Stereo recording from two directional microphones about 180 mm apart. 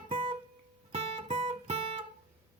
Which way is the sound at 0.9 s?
30° right (ahead or behind).